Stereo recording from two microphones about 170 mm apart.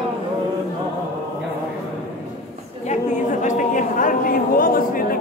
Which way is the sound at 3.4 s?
50° left (ahead or behind).